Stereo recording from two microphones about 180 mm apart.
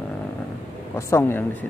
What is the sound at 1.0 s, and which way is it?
Speech, 15° left (ahead or behind).